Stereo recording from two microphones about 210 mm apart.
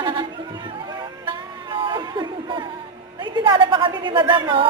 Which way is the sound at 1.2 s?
25° right (ahead or behind).